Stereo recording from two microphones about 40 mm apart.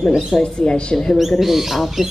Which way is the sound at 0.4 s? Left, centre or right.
Left.